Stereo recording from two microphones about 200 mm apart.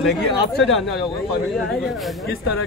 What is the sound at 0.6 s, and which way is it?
A woman's voice, centre (ahead or behind).